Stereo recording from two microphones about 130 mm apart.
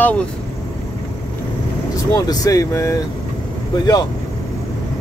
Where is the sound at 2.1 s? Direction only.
30° left (ahead or behind).